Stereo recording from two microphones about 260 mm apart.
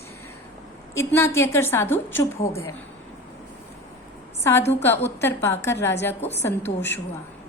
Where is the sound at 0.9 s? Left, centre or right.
Centre.